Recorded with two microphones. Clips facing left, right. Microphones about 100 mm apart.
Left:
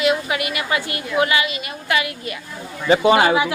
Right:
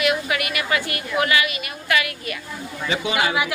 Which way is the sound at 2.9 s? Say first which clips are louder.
Left 9 dB; 40° left (ahead or behind).